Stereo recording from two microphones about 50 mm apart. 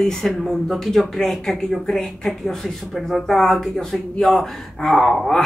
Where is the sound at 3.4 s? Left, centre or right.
Centre.